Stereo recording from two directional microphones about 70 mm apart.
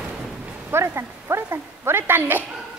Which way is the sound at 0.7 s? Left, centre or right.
Right.